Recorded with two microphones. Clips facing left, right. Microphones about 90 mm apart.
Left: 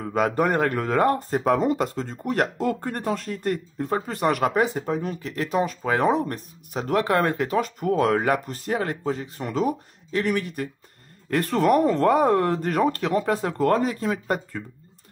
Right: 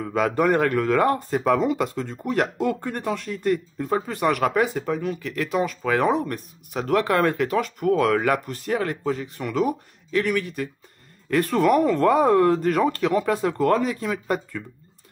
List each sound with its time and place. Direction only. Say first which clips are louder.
0.4 s speech: right 2 dB; 35° left (ahead or behind)